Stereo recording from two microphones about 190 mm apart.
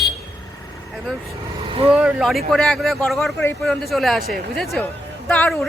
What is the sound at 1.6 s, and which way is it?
Vehicle, 30° right (ahead or behind).